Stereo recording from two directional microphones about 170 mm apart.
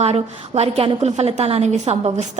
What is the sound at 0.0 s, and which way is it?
A woman's voice, 40° right (ahead or behind).